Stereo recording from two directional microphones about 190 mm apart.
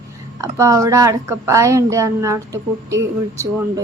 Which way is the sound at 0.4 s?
15° right (ahead or behind).